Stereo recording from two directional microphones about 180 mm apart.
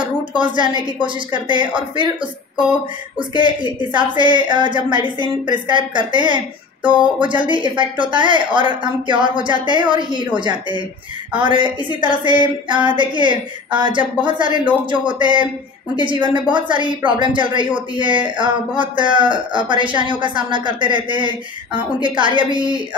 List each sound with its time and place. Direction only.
0.4 s speech: 25° right (ahead or behind)
3.2 s speech: 25° right (ahead or behind)